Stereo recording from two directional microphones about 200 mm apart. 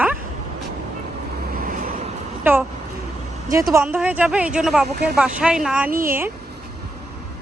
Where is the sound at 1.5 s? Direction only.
45° right (ahead or behind).